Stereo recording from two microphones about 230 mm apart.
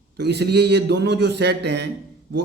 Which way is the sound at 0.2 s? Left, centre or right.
Right.